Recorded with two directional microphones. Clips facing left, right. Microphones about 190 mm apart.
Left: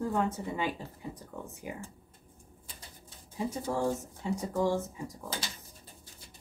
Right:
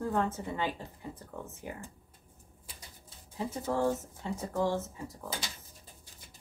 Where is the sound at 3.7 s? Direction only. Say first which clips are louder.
Right 4 dB; 15° left (ahead or behind).